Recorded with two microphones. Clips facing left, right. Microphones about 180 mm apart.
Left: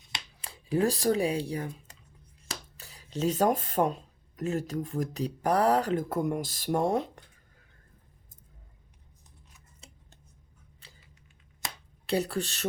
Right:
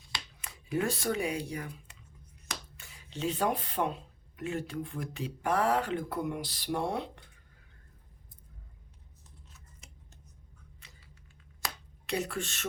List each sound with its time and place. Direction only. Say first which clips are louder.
0.3 s speech: left 5 dB; 30° left (ahead or behind)
9.8 s scissors: left 5 dB; 30° left (ahead or behind)
10.8 s typing: left 4 dB; 30° left (ahead or behind)
12.0 s speech: left 5 dB; 35° left (ahead or behind)